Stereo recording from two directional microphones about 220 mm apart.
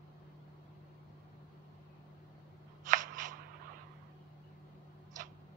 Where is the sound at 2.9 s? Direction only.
35° right (ahead or behind).